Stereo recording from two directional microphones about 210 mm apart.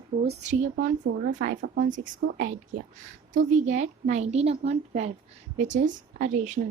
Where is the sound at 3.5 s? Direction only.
35° right (ahead or behind).